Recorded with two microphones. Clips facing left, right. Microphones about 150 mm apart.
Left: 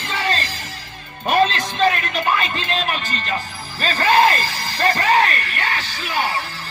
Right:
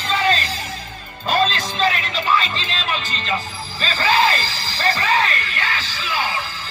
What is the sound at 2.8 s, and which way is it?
Speech, 55° left (ahead or behind).